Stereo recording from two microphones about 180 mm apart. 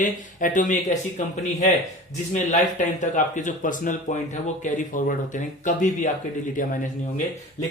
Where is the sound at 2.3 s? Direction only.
45° left (ahead or behind).